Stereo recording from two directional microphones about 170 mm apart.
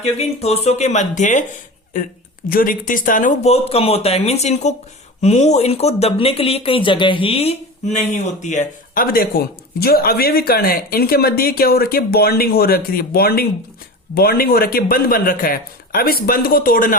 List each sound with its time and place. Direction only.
0.0 s speech: 40° left (ahead or behind)
2.5 s speech: 55° left (ahead or behind)